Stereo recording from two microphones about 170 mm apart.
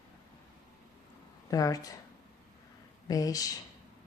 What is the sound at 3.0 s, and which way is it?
Speech, 20° left (ahead or behind).